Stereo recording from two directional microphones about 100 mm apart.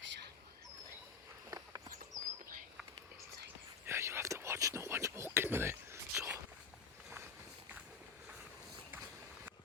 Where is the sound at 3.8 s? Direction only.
25° right (ahead or behind).